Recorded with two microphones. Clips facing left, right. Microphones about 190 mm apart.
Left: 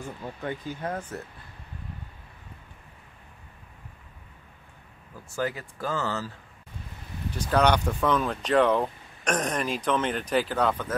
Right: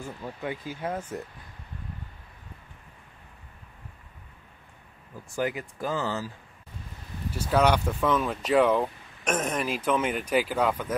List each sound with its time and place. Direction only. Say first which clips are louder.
0.4 s speech: left 1 dB; 10° right (ahead or behind)
5.3 s speech: right 1 dB; 15° right (ahead or behind)